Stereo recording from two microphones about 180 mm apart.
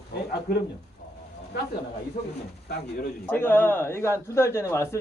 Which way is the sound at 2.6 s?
65° left (ahead or behind).